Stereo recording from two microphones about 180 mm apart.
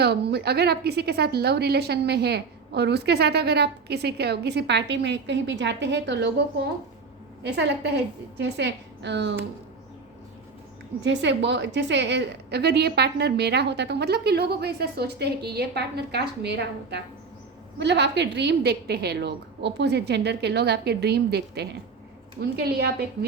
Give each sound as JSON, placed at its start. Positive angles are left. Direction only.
{"t": 0.0, "sound": "a woman's voice", "side_deg": -65}
{"t": 7.4, "sound": "a woman's voice", "side_deg": -70}
{"t": 11.0, "sound": "a woman's voice", "side_deg": -75}